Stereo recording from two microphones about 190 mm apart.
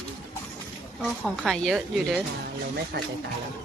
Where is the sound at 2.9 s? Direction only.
55° right (ahead or behind).